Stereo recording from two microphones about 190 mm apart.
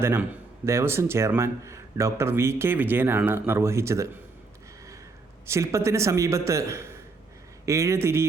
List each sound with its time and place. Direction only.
0.0 s speech: 15° right (ahead or behind)
5.5 s speech: 15° right (ahead or behind)